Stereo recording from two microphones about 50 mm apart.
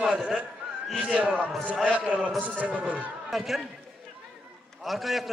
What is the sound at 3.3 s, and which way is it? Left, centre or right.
Speech, centre.